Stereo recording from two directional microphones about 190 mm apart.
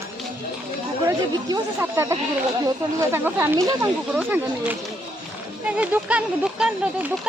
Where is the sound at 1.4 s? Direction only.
15° right (ahead or behind).